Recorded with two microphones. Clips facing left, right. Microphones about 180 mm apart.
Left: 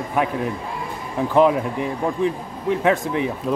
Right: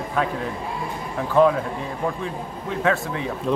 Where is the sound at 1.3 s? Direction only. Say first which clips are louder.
Left 1 dB; 15° left (ahead or behind).